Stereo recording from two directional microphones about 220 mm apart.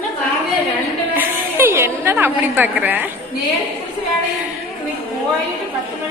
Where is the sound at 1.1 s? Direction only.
10° right (ahead or behind).